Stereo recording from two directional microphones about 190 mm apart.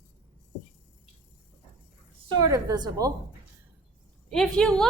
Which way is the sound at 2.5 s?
20° right (ahead or behind).